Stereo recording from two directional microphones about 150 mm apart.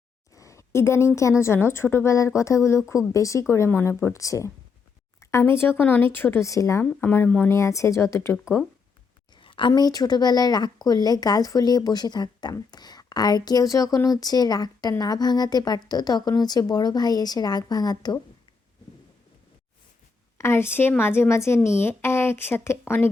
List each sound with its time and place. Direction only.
0.3 s a sound: 20° left (ahead or behind)
1.4 s a woman's voice: 15° left (ahead or behind)
9.3 s a woman's voice: 35° left (ahead or behind)
20.4 s a woman's voice: 15° left (ahead or behind)